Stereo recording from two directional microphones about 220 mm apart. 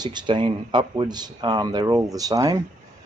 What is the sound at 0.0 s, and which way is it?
Speech, 20° right (ahead or behind).